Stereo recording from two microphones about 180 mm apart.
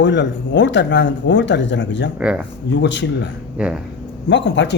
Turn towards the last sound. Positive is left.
turn(degrees=80)